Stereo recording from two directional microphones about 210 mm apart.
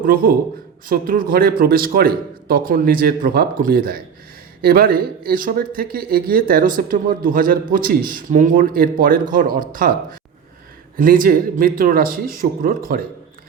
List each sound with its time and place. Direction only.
0.0 s speech: 45° right (ahead or behind)